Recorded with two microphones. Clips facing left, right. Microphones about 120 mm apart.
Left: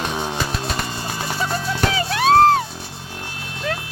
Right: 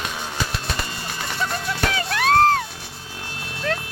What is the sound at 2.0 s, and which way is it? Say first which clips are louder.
Music: left 3 dB; 25° left (ahead or behind).